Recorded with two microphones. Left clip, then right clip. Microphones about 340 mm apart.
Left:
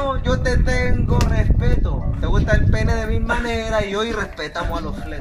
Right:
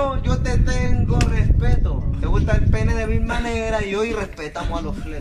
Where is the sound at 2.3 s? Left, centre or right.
Centre.